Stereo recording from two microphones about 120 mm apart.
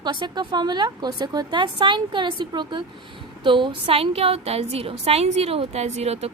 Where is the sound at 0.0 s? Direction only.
40° right (ahead or behind).